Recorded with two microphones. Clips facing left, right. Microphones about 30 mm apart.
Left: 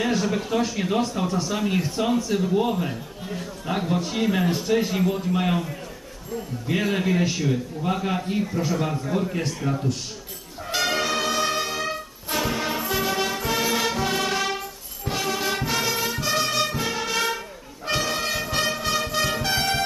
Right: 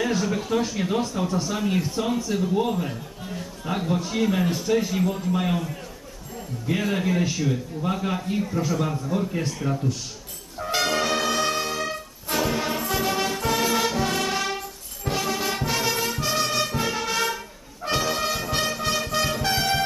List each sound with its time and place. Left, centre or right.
0.0 s a man's voice: centre
10.6 s brass instrument: centre
15.0 s music: centre